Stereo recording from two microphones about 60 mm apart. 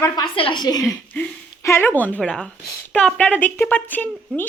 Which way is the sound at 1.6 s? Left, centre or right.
Left.